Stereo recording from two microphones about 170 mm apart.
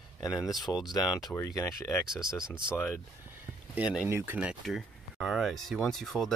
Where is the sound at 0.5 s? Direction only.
25° left (ahead or behind).